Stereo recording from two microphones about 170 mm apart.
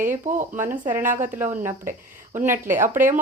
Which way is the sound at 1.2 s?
15° right (ahead or behind).